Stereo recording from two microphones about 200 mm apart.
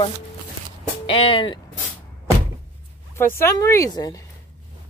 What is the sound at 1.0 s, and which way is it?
Speech, 25° left (ahead or behind).